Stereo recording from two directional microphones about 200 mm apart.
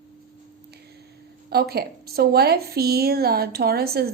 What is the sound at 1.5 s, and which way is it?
A woman's voice, 50° right (ahead or behind).